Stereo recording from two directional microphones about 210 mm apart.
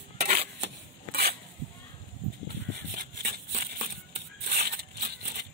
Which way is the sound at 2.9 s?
50° right (ahead or behind).